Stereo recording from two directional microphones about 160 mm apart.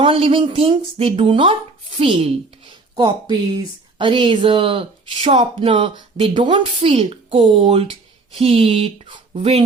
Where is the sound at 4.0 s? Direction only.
30° right (ahead or behind).